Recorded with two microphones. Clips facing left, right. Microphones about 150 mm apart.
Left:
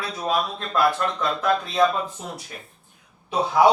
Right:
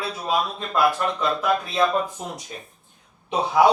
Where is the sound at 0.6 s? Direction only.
10° right (ahead or behind).